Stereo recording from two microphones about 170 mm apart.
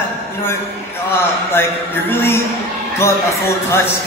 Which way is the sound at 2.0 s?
15° left (ahead or behind).